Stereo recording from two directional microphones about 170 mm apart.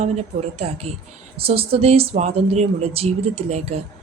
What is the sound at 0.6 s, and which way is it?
A woman's voice, 40° right (ahead or behind).